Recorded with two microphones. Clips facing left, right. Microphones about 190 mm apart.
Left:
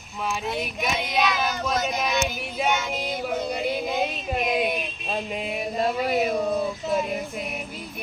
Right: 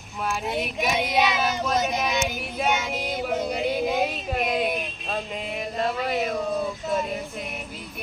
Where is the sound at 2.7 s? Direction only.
10° right (ahead or behind).